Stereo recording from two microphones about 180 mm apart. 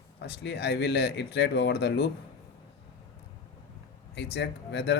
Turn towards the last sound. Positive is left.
turn(degrees=70)  # may be behind; listen again after turning